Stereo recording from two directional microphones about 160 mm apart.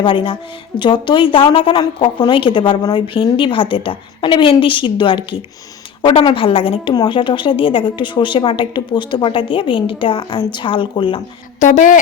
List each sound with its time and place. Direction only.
0.0 s a woman's voice: 30° left (ahead or behind)
11.6 s a woman's voice: 50° left (ahead or behind)